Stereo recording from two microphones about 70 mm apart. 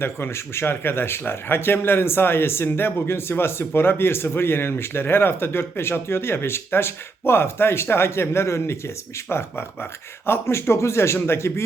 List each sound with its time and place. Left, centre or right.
0.0 s speech: left